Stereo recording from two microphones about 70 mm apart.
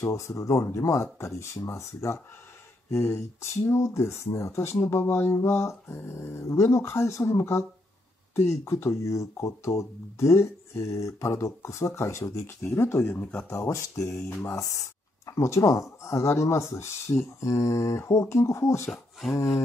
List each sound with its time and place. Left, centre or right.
0.0 s speech: left
4.8 s a sound: left
8.5 s speech: left
13.5 s speech: left